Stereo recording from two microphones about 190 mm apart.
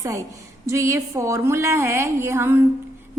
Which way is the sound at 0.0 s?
15° right (ahead or behind).